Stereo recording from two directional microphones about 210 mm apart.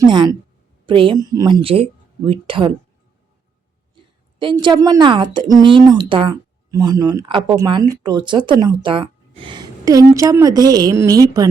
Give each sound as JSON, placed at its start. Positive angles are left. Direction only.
{"t": 0.0, "sound": "speech", "side_deg": -20}
{"t": 4.4, "sound": "speech", "side_deg": -20}